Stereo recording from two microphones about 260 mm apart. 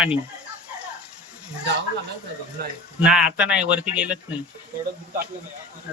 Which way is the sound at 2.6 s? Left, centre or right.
Right.